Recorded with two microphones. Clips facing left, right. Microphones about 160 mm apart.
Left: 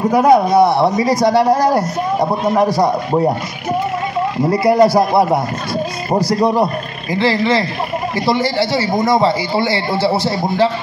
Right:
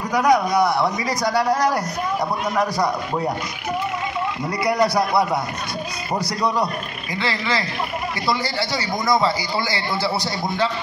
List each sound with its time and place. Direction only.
0.0 s a man's voice: 25° left (ahead or behind)
4.4 s a man's voice: 30° left (ahead or behind)